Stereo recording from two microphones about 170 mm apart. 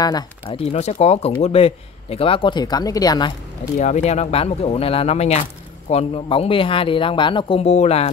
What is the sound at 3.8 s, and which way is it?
A man's voice, 40° left (ahead or behind).